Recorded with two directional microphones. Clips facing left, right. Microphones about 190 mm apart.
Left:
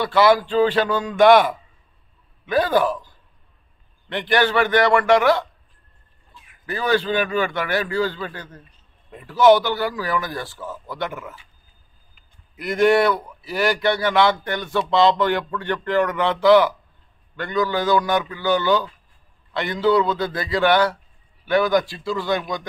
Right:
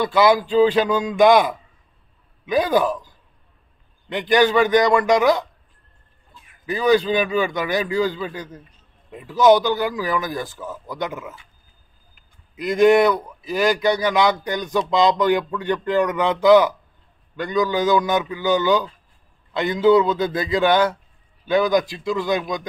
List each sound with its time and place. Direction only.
0.0 s a man's voice: 15° right (ahead or behind)
4.1 s a man's voice: 15° right (ahead or behind)
6.6 s a man's voice: 15° right (ahead or behind)
12.5 s a man's voice: 20° right (ahead or behind)